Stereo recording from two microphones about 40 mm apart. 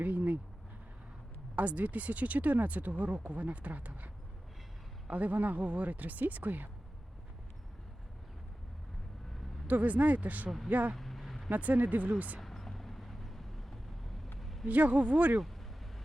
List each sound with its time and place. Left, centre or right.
0.0 s a sound: right
1.5 s speech: right
5.1 s speech: right
9.6 s speech: right
10.9 s vehicle: centre
11.4 s speech: right
12.4 s vehicle: centre
14.3 s a sound: centre
14.7 s speech: right